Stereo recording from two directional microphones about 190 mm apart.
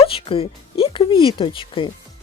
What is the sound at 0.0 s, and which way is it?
Speech, 30° left (ahead or behind).